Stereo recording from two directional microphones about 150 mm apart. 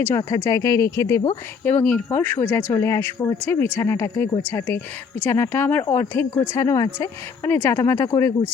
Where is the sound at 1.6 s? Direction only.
10° left (ahead or behind).